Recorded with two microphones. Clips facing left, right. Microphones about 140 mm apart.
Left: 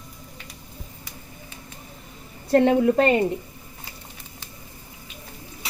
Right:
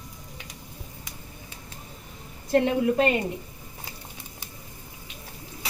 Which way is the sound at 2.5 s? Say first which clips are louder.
Left 4 dB; 25° left (ahead or behind).